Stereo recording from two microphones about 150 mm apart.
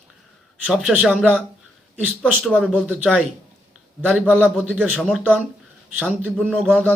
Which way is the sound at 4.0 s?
10° right (ahead or behind).